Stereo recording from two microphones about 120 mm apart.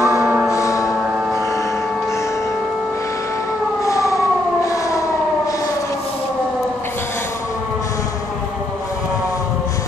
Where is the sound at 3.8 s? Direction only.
25° left (ahead or behind).